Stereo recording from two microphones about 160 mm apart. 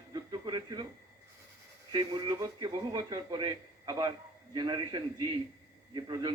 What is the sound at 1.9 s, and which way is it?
A man's voice, 25° right (ahead or behind).